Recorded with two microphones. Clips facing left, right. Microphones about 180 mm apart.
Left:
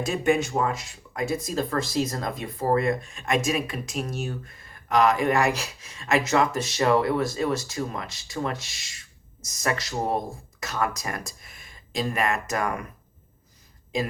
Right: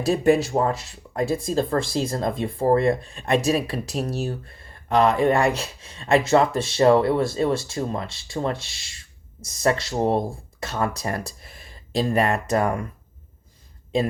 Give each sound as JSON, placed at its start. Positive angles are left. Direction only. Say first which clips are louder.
{"t": 0.0, "sound": "speech", "louder": "right 5 dB", "side_deg": -35}